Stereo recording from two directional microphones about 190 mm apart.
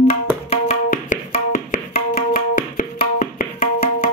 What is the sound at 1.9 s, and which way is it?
Tabla, 50° left (ahead or behind).